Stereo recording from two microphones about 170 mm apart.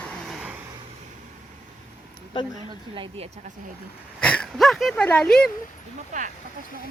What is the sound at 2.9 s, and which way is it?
Speech, 30° right (ahead or behind).